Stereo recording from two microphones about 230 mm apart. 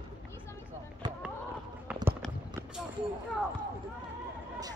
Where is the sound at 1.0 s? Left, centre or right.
Centre.